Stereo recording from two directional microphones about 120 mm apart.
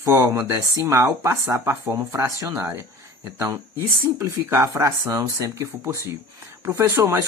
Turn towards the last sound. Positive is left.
turn(degrees=-20)  # may be behind; listen again after turning